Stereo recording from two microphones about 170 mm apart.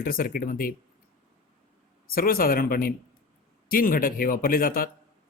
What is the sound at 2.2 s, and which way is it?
Speech, 60° left (ahead or behind).